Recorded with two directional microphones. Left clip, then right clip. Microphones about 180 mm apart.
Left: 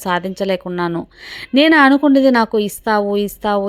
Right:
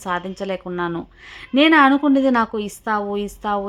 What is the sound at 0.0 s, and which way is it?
A woman's voice, 25° left (ahead or behind).